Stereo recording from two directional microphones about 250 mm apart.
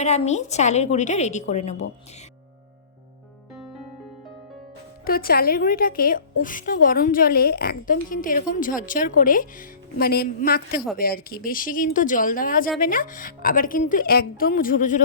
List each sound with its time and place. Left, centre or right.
0.0 s a woman's voice: left
5.0 s a woman's voice: left